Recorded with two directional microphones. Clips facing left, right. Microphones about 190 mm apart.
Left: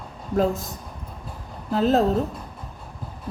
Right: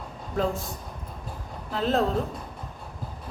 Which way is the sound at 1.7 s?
40° left (ahead or behind).